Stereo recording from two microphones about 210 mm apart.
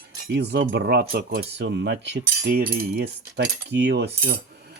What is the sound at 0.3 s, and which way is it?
Speech, 55° right (ahead or behind).